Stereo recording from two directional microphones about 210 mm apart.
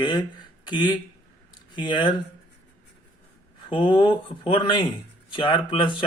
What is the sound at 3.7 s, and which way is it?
Speech, 25° left (ahead or behind).